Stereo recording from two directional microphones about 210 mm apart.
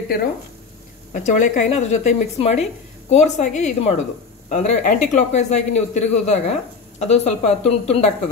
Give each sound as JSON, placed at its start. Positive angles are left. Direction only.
{"t": 1.1, "sound": "speech", "side_deg": 35}